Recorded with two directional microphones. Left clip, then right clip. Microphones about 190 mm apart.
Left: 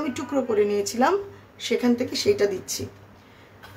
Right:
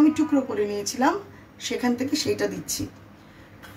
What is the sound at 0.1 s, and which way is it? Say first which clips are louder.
Speech: even; 40° left (ahead or behind).